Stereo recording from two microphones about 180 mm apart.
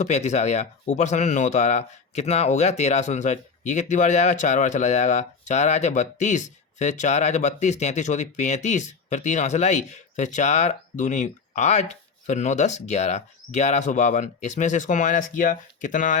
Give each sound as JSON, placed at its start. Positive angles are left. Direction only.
{"t": 0.0, "sound": "speech", "side_deg": 40}